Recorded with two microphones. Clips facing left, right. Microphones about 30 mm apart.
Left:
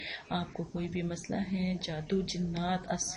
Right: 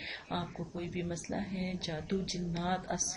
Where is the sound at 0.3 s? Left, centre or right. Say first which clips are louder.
Left 3 dB; centre.